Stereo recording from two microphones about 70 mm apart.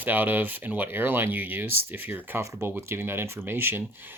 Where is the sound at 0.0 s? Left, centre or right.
Right.